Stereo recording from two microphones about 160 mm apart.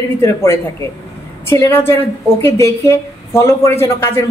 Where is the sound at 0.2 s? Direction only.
15° left (ahead or behind).